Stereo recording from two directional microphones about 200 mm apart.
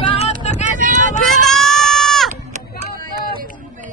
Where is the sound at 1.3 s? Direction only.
Centre (ahead or behind).